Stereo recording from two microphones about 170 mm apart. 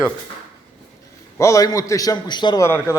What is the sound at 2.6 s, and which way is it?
Speech, 15° left (ahead or behind).